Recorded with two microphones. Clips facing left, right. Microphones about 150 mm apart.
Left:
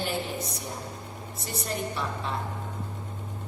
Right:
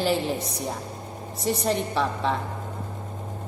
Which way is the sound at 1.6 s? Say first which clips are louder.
Right 5 dB; 90° right.